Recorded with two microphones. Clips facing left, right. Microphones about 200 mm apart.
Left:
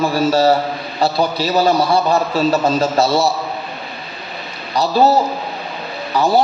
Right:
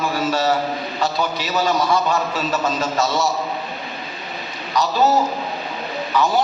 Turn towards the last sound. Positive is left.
turn(degrees=35)  # may be behind; listen again after turning